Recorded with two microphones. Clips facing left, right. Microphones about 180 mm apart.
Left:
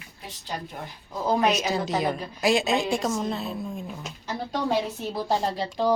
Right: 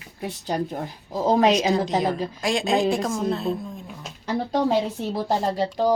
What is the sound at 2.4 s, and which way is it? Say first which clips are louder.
Speech: even; 5° left (ahead or behind).